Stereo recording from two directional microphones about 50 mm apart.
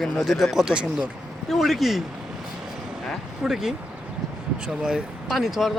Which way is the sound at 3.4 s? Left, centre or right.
Centre.